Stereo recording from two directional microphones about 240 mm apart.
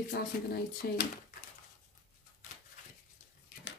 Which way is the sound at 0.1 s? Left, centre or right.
Left.